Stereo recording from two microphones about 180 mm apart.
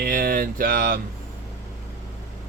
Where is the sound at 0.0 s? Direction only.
55° right (ahead or behind).